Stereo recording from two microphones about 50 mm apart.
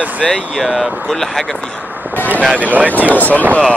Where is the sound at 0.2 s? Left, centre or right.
Centre.